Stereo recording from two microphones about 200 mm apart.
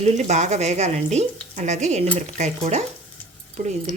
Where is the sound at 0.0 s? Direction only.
35° right (ahead or behind).